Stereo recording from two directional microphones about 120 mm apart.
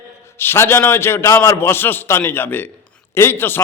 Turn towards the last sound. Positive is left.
turn(degrees=15)  # may be behind; listen again after turning